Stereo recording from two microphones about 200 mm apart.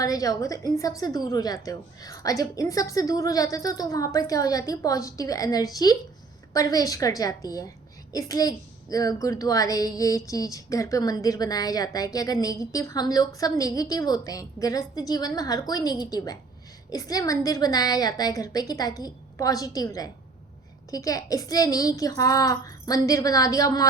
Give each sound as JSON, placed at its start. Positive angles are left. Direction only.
{"t": 0.0, "sound": "a woman's voice", "side_deg": 15}